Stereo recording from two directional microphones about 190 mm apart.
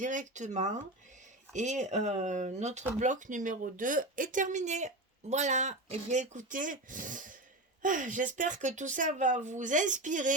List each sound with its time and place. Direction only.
0.0 s a woman's voice: 40° right (ahead or behind)